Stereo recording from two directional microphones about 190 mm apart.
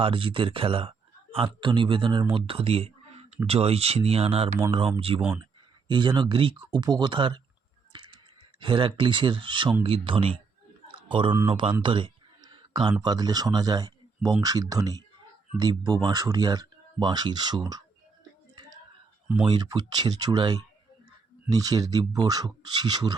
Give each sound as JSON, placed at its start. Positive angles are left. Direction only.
{"t": 0.0, "sound": "speech", "side_deg": -25}
{"t": 7.9, "sound": "music", "side_deg": -25}
{"t": 8.6, "sound": "speech", "side_deg": -25}
{"t": 10.8, "sound": "a sound", "side_deg": -25}
{"t": 11.4, "sound": "speech", "side_deg": -25}
{"t": 11.8, "sound": "a sound", "side_deg": -25}
{"t": 12.9, "sound": "speech", "side_deg": -20}
{"t": 19.5, "sound": "speech", "side_deg": -20}